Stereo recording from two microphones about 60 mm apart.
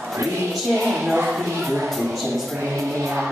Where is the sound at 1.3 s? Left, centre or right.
Centre.